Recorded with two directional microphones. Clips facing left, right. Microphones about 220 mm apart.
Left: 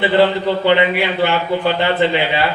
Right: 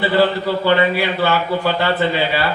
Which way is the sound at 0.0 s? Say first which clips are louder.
Left 2 dB; 20° left (ahead or behind).